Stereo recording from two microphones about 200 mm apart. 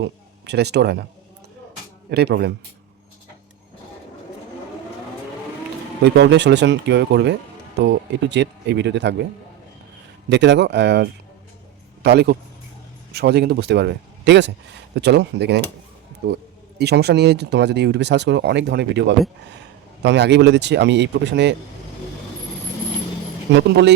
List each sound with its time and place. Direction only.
0.0 s speech: 55° right (ahead or behind)
2.0 s speech: 55° right (ahead or behind)
6.1 s speech: 60° right (ahead or behind)
10.2 s speech: 60° right (ahead or behind)
23.5 s speech: 65° right (ahead or behind)